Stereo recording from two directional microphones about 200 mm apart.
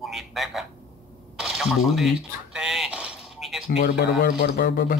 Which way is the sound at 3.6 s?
60° left (ahead or behind).